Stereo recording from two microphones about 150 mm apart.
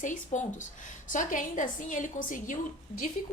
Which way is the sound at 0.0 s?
60° left (ahead or behind).